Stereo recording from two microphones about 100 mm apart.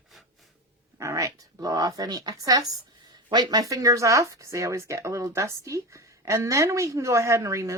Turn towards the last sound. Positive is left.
turn(degrees=-30)  # may be behind; listen again after turning